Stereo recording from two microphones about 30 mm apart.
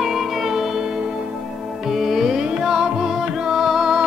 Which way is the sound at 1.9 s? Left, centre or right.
Centre.